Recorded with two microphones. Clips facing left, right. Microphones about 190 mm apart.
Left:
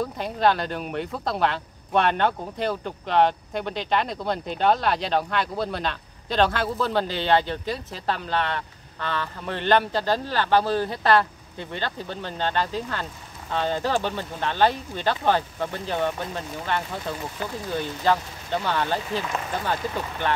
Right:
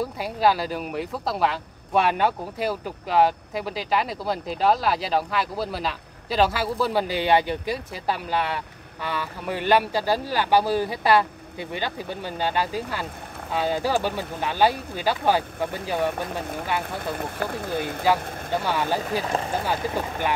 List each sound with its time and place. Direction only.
0.0 s speech: 5° right (ahead or behind)
17.1 s speech: 55° right (ahead or behind)
18.0 s speech: 10° right (ahead or behind)
19.2 s speech: 35° right (ahead or behind)
19.6 s speech: 10° right (ahead or behind)